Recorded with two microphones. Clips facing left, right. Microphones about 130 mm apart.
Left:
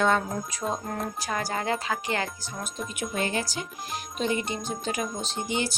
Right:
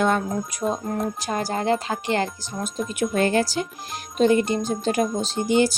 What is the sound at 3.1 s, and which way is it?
Speech, 55° right (ahead or behind).